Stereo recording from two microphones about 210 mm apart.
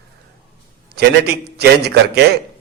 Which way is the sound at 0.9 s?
50° right (ahead or behind).